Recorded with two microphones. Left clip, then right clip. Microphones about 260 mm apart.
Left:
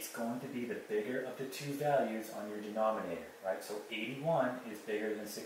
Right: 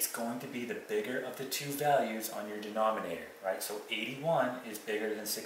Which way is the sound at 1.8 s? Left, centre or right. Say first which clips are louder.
Right 3 dB; centre.